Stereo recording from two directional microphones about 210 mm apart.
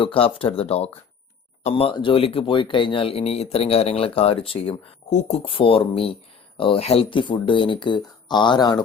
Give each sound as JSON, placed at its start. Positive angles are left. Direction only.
{"t": 0.0, "sound": "speech", "side_deg": 25}